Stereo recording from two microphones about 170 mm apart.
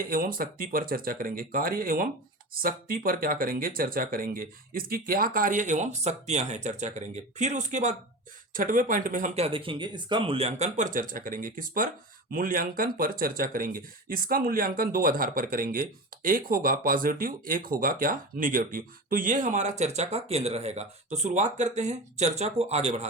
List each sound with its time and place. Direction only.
0.0 s speech: 55° right (ahead or behind); by 23.0 s 40° right (ahead or behind)